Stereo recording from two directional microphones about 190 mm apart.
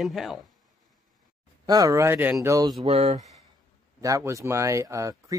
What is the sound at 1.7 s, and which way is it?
Speech, 20° right (ahead or behind).